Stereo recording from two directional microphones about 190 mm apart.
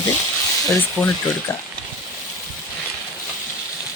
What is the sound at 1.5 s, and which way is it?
Speech, 10° left (ahead or behind).